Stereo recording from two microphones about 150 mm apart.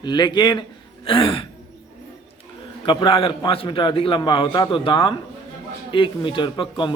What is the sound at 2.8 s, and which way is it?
A man's voice, 35° left (ahead or behind).